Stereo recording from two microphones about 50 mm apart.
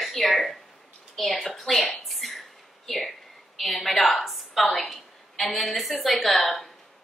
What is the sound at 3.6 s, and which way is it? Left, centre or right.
A woman's voice, centre.